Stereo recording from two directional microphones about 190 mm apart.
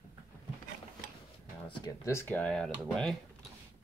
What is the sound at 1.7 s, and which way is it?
Speech, 15° left (ahead or behind).